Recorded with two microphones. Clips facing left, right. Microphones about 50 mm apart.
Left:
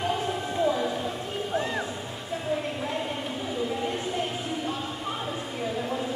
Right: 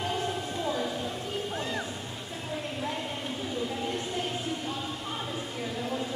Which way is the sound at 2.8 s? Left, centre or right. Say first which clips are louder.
Left 3 dB; centre.